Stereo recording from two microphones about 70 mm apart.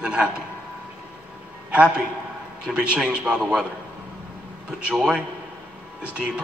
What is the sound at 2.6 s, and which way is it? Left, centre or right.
Speech, centre.